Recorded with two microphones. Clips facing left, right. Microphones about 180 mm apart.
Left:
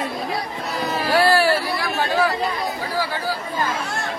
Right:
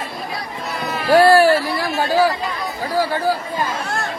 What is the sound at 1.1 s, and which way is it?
Hubbub, 45° right (ahead or behind).